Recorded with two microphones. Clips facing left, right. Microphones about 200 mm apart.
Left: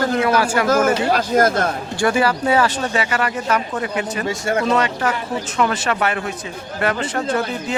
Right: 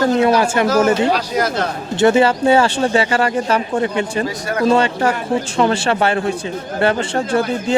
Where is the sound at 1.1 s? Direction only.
50° left (ahead or behind).